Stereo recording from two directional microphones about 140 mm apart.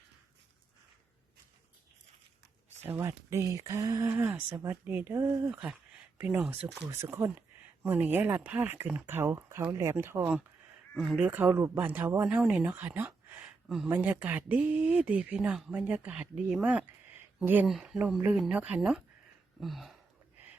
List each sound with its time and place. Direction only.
2.8 s speech: 15° right (ahead or behind)
4.1 s speech: 15° right (ahead or behind)
6.1 s speech: 15° right (ahead or behind)
19.5 s a sound: centre (ahead or behind)